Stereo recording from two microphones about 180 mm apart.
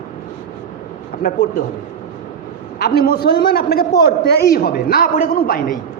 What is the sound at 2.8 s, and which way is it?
A man's voice, 60° left (ahead or behind).